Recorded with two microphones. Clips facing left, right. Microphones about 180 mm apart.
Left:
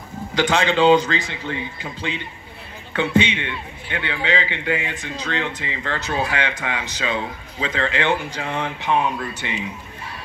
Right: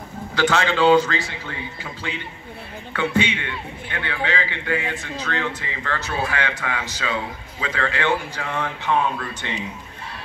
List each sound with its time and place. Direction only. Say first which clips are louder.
0.3 s a man's voice: left 1 dB; 15° left (ahead or behind)